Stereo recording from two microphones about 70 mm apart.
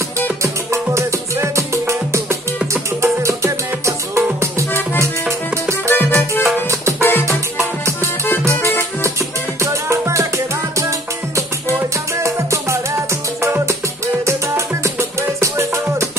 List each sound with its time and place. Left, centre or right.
0.9 s music: right
5.9 s music: left
6.4 s music: right
7.0 s music: left
9.6 s music: right
12.2 s music: right